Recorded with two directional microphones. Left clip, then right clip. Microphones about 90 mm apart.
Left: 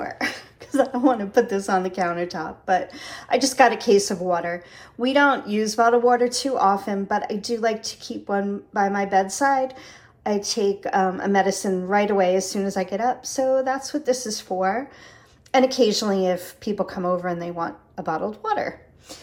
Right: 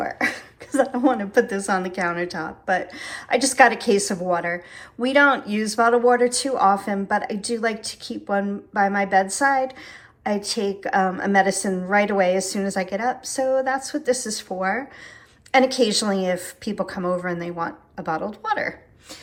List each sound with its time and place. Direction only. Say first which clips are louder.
0.0 s a sound: right 3 dB; 15° left (ahead or behind)
0.9 s a woman's voice: left 1 dB; 35° left (ahead or behind)
3.9 s a woman's voice: left 3 dB; 5° right (ahead or behind)
4.2 s a woman's voice: right 1 dB; 35° left (ahead or behind)
13.6 s a woman's voice: right 1 dB; 5° right (ahead or behind)
13.8 s a woman's voice: even; 35° left (ahead or behind); by 18.6 s 50° left (ahead or behind)